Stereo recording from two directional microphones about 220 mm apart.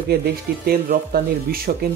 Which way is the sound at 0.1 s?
45° right (ahead or behind).